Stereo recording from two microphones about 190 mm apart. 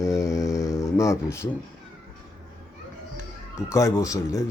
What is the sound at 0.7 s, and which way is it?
Speech, 15° left (ahead or behind).